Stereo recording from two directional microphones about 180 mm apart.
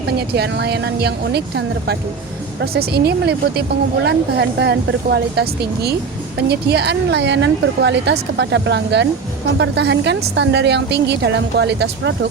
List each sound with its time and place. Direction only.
0.2 s a woman's voice: 65° right (ahead or behind)